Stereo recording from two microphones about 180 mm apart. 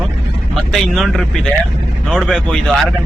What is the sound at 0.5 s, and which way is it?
Speech, centre (ahead or behind).